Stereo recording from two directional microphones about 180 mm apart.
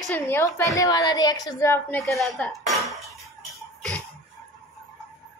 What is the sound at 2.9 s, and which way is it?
Cutlery, centre (ahead or behind).